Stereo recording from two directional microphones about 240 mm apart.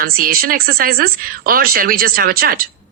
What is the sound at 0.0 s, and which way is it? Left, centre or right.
Speech, right.